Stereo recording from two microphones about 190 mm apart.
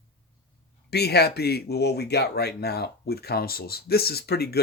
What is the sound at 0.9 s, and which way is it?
Speech, 60° left (ahead or behind).